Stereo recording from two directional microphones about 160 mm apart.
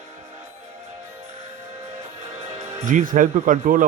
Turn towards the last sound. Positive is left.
turn(degrees=-55)  # may be behind; listen again after turning